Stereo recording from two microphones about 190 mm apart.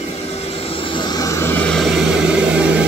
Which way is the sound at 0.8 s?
25° left (ahead or behind).